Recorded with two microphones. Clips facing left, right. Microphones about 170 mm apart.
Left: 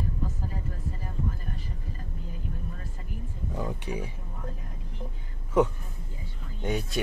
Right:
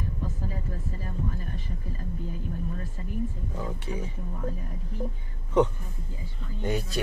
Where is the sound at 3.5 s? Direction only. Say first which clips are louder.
Left 5 dB; 15° left (ahead or behind).